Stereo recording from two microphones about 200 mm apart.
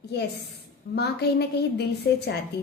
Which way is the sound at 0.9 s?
55° left (ahead or behind).